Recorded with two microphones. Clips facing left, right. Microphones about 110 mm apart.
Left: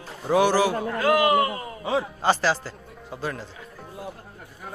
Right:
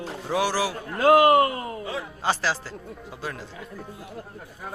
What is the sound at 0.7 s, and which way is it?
Speech, 75° left (ahead or behind).